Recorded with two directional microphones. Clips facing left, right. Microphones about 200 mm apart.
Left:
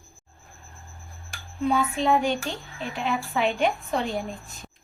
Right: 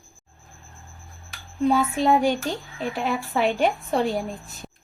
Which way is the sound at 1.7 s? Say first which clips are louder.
Right 2 dB; 40° right (ahead or behind).